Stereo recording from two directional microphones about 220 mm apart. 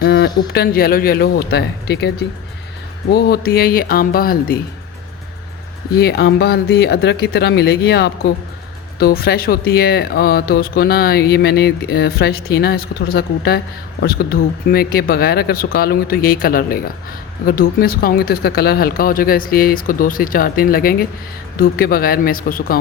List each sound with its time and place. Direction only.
0.0 s speech: 50° left (ahead or behind)
5.9 s speech: 50° left (ahead or behind)